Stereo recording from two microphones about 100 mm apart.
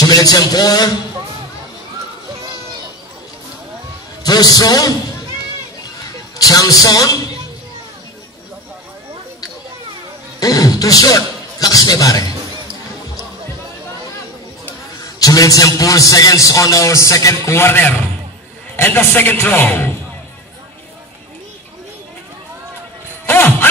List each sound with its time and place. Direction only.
0.0 s a man's voice: 40° left (ahead or behind)
4.2 s a man's voice: 40° left (ahead or behind)
6.3 s a man's voice: 35° left (ahead or behind)
10.4 s speech: 35° left (ahead or behind)
15.0 s a sound: 35° left (ahead or behind)
15.8 s a man's voice: 35° left (ahead or behind); by 19.9 s 20° left (ahead or behind)
23.2 s music: 20° left (ahead or behind)